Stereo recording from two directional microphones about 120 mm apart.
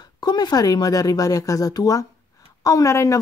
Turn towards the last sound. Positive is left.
turn(degrees=25)  # may be behind; listen again after turning